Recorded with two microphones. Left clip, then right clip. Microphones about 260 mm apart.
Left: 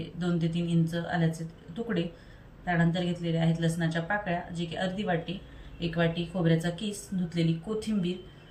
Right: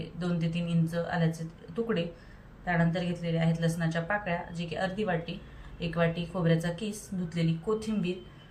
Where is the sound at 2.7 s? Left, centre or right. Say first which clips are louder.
Left 1 dB; centre.